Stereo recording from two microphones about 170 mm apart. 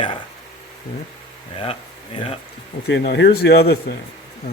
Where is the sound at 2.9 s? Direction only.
80° left.